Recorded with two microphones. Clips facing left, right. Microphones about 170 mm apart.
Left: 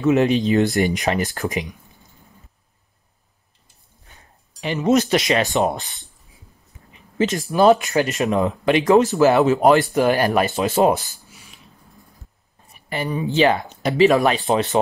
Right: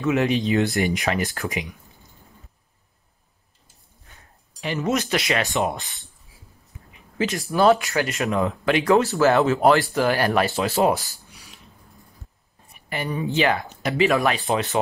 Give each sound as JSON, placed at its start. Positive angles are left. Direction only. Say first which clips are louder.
{"t": 0.0, "sound": "speech", "louder": "left 4 dB", "side_deg": 30}
{"t": 0.5, "sound": "speech", "louder": "left 3 dB", "side_deg": 40}
{"t": 4.6, "sound": "speech", "louder": "left 5 dB", "side_deg": 20}
{"t": 5.3, "sound": "speech", "louder": "left 3 dB", "side_deg": 35}
{"t": 7.2, "sound": "speech", "louder": "left 3 dB", "side_deg": 20}
{"t": 11.2, "sound": "a sound", "louder": "left 1 dB", "side_deg": 0}
{"t": 12.9, "sound": "speech", "louder": "left 3 dB", "side_deg": 30}